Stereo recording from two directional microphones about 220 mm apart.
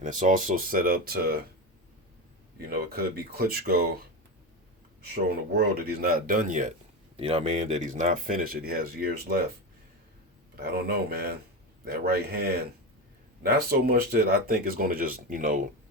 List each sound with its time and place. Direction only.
0.0 s speech: 35° right (ahead or behind)
2.6 s speech: 45° right (ahead or behind)
5.1 s speech: 45° right (ahead or behind)
10.5 s speech: 45° right (ahead or behind)